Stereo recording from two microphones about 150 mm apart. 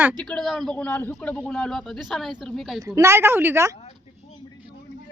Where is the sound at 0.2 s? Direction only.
5° left (ahead or behind).